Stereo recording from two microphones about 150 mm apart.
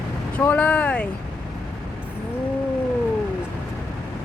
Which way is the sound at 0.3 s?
10° left (ahead or behind).